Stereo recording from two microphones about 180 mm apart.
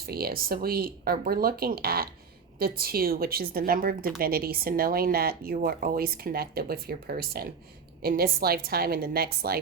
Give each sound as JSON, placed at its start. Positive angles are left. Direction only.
{"t": 0.0, "sound": "a woman's voice", "side_deg": -60}